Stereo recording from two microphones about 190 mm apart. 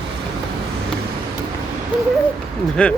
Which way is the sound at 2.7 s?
5° left (ahead or behind).